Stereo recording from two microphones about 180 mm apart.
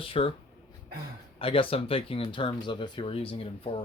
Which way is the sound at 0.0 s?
30° left (ahead or behind).